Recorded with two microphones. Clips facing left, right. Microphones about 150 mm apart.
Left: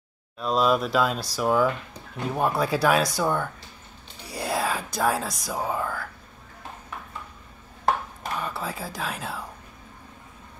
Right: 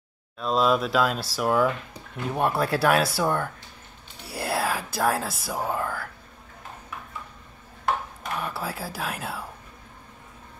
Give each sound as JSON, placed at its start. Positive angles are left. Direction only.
{"t": 0.4, "sound": "speech", "side_deg": 0}
{"t": 8.4, "sound": "speech", "side_deg": -5}